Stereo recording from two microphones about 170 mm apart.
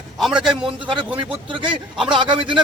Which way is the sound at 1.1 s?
30° right (ahead or behind).